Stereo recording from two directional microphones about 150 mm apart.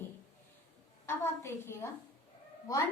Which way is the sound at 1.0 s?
15° left (ahead or behind).